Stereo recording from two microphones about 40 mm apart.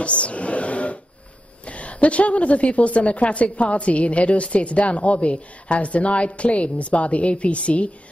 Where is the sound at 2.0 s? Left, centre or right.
Left.